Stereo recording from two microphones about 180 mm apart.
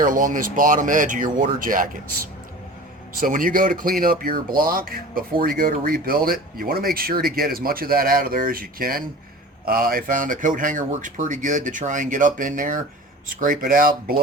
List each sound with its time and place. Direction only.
0.0 s speech: 45° right (ahead or behind)
3.2 s speech: 50° right (ahead or behind)